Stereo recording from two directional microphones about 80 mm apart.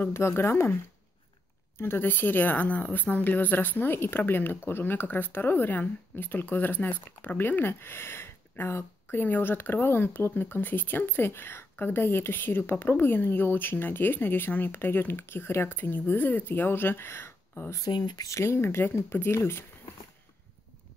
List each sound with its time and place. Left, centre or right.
0.0 s speech: left
1.8 s speech: left
17.7 s speech: left
18.2 s speech: left